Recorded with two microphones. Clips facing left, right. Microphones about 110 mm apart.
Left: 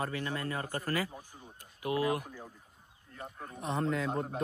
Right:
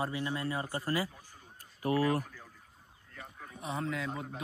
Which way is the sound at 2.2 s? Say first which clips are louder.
Left 5 dB; 15° left (ahead or behind).